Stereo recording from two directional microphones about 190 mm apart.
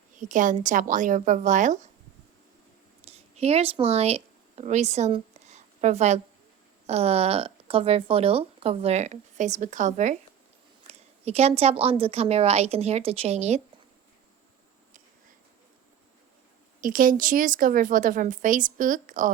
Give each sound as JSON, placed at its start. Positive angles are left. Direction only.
{"t": 0.2, "sound": "speech", "side_deg": -40}
{"t": 3.1, "sound": "speech", "side_deg": -35}
{"t": 16.8, "sound": "a woman's voice", "side_deg": -45}